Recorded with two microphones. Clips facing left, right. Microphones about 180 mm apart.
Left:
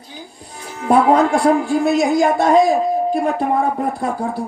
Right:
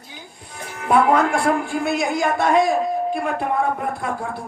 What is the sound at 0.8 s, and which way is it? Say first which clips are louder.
A man's voice: left 4 dB; 35° left (ahead or behind).